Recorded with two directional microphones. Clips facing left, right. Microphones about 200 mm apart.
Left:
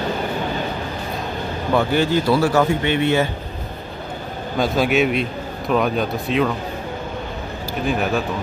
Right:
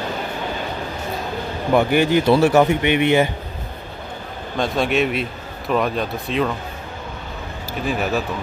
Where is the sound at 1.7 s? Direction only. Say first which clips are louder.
Right 2 dB; 15° right (ahead or behind).